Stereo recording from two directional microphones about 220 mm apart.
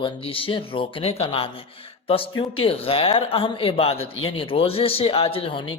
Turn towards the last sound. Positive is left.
turn(degrees=25)  # may be behind; listen again after turning